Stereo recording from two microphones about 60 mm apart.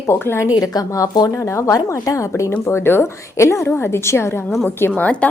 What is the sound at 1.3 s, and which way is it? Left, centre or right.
Speech, left.